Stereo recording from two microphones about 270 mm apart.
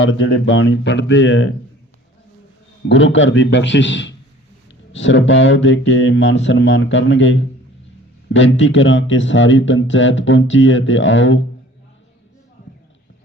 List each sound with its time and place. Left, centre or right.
0.0 s speech: left
2.9 s speech: left